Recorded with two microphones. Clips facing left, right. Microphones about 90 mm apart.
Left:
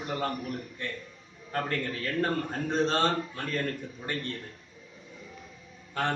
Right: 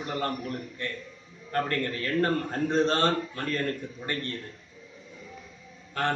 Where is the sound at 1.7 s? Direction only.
5° left (ahead or behind).